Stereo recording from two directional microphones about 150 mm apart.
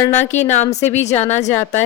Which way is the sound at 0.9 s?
50° left (ahead or behind).